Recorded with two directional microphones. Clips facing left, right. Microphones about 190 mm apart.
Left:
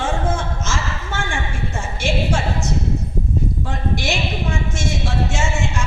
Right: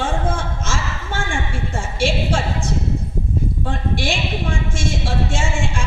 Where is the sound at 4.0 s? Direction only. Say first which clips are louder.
Even; 30° right (ahead or behind).